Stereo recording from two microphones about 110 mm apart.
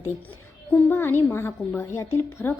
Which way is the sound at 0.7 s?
15° left (ahead or behind).